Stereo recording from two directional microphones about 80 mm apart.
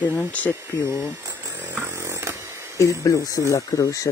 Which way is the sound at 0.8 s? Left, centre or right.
Right.